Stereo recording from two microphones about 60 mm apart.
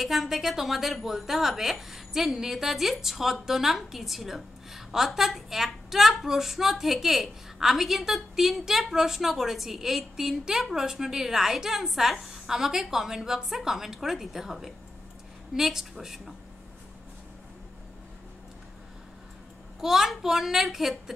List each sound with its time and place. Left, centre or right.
0.0 s a woman's voice: centre
19.8 s a woman's voice: centre